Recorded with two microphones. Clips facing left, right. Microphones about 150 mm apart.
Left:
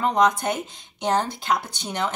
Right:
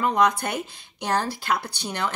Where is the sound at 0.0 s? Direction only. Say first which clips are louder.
Left 1 dB; 25° left (ahead or behind).